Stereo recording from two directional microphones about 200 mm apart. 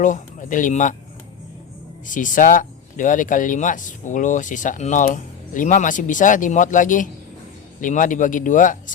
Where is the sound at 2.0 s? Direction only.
40° left (ahead or behind).